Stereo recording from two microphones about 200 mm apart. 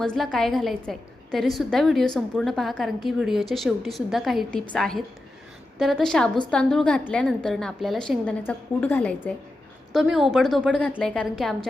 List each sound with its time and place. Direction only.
0.0 s a woman's voice: 5° left (ahead or behind)
9.9 s a woman's voice: centre (ahead or behind)